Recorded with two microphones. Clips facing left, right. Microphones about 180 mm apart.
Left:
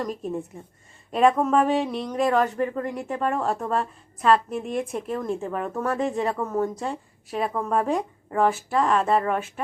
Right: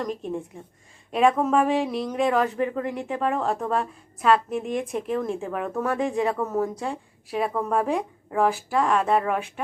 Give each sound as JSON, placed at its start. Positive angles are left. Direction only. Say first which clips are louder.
{"t": 0.0, "sound": "a woman's voice", "louder": "even", "side_deg": 5}